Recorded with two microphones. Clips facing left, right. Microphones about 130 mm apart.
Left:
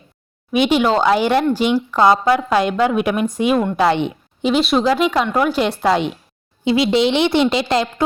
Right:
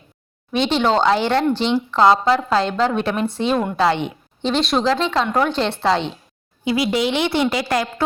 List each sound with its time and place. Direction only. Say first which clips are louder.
0.5 s a woman's voice: left 2 dB; 10° left (ahead or behind)
4.5 s a woman's voice: left 3 dB; 5° left (ahead or behind)
6.7 s a woman's voice: left 4 dB; 25° left (ahead or behind)